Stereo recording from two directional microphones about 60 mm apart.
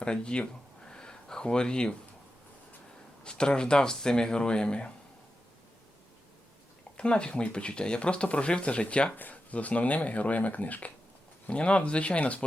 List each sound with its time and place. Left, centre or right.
0.0 s speech: centre
0.9 s a sound: centre
3.2 s speech: centre
6.9 s speech: centre